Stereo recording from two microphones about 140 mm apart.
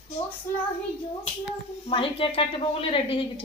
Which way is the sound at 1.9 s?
40° left (ahead or behind).